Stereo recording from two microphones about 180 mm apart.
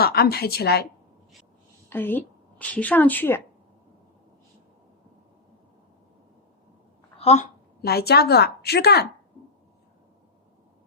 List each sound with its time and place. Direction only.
0.0 s a woman's voice: 60° left (ahead or behind)
1.9 s a woman's voice: 10° left (ahead or behind)
7.2 s speech: 35° left (ahead or behind)
7.8 s a woman's voice: 60° left (ahead or behind)